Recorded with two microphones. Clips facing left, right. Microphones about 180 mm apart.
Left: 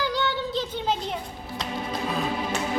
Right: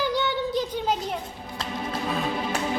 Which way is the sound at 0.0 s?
20° right (ahead or behind).